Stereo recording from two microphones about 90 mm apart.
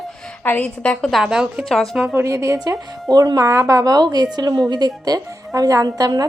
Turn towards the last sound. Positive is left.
turn(degrees=-45)  # may be behind; listen again after turning